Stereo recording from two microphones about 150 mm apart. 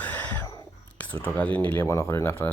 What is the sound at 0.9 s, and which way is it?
Speech, 10° left (ahead or behind).